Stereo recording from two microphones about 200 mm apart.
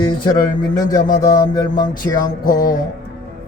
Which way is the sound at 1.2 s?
20° left (ahead or behind).